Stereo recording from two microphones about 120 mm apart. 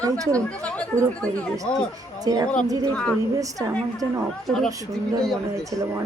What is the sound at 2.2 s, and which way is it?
Speech, 30° right (ahead or behind).